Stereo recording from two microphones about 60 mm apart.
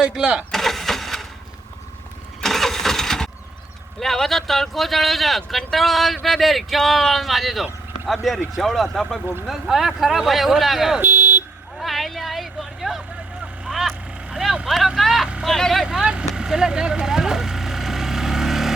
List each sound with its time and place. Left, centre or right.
0.0 s speech: centre
0.5 s a sound: centre
2.4 s engine starting: centre
4.0 s speech: centre
11.0 s vehicle: right
11.8 s a sound: centre
13.7 s vehicle: centre
14.9 s vehicle: centre
15.4 s speech: centre
15.8 s vehicle: centre